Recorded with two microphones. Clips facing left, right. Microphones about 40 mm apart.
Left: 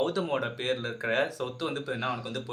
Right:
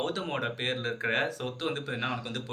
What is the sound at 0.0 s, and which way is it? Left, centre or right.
Speech, right.